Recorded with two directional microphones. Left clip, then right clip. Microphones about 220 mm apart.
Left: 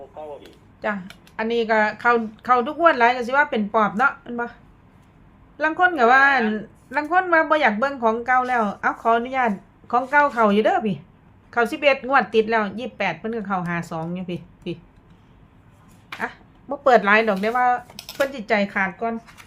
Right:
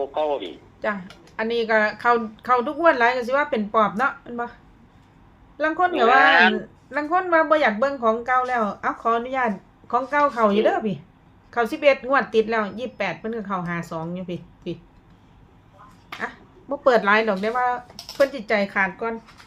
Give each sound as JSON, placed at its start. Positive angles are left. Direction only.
{"t": 0.1, "sound": "a man's voice", "side_deg": -55}
{"t": 0.8, "sound": "a woman's voice", "side_deg": 5}
{"t": 5.5, "sound": "speech", "side_deg": 5}
{"t": 16.1, "sound": "a woman's voice", "side_deg": 5}